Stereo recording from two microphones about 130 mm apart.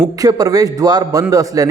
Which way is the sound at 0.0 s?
30° right (ahead or behind).